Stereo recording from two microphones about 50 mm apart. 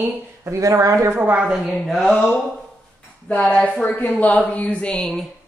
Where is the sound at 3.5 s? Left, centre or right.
Left.